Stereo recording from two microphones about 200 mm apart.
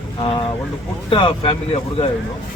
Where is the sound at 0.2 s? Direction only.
25° left (ahead or behind).